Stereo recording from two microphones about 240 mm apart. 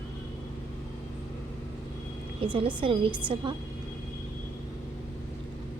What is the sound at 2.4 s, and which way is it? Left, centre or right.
Speech, right.